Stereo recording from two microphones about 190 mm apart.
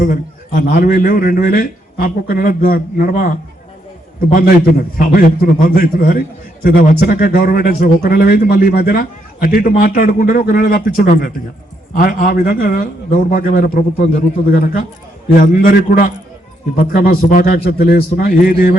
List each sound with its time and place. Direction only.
0.0 s a man's voice: 50° left (ahead or behind)
4.4 s a man's voice: 50° left (ahead or behind)